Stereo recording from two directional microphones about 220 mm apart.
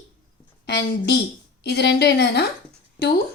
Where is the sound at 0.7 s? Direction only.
45° left (ahead or behind).